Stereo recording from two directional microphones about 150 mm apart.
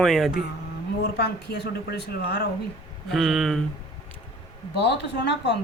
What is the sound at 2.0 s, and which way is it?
Speech, 90° left.